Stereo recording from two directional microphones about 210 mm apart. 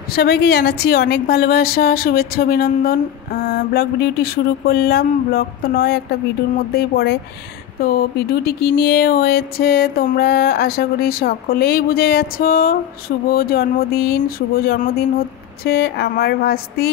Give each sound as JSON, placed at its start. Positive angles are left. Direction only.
{"t": 0.1, "sound": "speech", "side_deg": 50}